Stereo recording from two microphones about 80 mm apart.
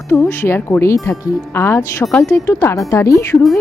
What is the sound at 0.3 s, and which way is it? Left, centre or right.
Speech, left.